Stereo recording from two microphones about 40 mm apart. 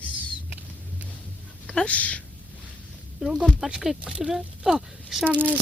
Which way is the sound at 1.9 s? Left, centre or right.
Left.